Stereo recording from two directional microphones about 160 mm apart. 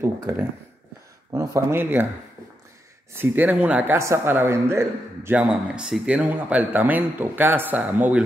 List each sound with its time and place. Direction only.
0.0 s a man's voice: 15° right (ahead or behind)
3.2 s a man's voice: 10° right (ahead or behind)